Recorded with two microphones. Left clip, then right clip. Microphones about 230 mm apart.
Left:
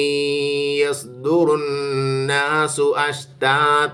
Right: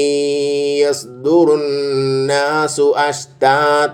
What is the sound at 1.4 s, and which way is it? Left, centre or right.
A man's voice, centre.